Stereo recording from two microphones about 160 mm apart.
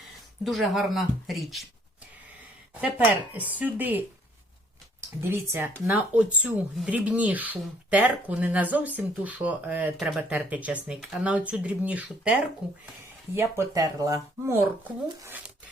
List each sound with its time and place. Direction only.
0.4 s speech: centre (ahead or behind)
3.3 s speech: 10° right (ahead or behind)
13.3 s speech: 15° right (ahead or behind)